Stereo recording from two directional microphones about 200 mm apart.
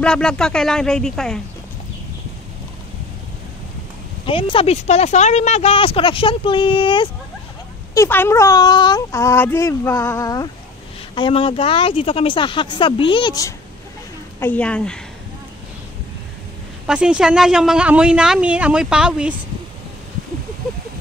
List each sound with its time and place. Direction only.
0.0 s speech: 5° left (ahead or behind)
4.3 s speech: 25° left (ahead or behind)
7.9 s speech: 10° left (ahead or behind)
14.4 s speech: 5° left (ahead or behind)
16.8 s speech: 5° right (ahead or behind)